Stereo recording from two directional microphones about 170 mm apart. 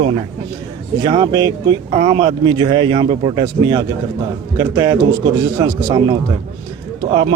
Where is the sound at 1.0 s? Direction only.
30° right (ahead or behind).